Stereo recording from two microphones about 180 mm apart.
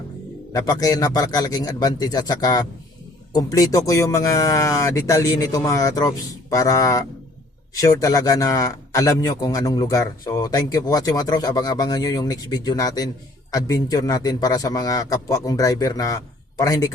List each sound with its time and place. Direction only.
0.5 s a man's voice: 20° left (ahead or behind)